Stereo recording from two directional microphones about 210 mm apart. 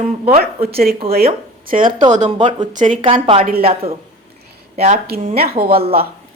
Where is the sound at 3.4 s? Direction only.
45° right (ahead or behind).